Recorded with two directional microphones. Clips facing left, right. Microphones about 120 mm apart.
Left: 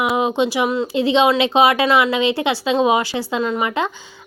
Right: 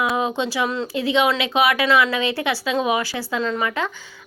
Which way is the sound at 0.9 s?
25° left (ahead or behind).